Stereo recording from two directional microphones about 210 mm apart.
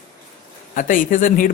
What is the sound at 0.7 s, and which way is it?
Speech, 40° left (ahead or behind).